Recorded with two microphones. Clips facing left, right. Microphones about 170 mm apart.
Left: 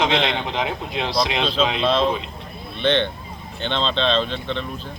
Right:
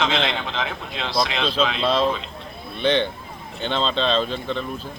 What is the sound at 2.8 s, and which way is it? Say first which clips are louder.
A man's voice: even; 10° right (ahead or behind).